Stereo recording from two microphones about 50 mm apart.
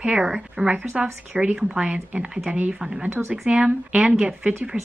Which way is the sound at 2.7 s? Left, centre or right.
Centre.